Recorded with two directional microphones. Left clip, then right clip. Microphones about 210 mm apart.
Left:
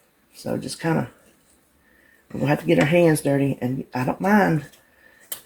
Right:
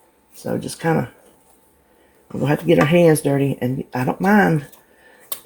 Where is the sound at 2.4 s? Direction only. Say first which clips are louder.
Right 3 dB; 30° right (ahead or behind).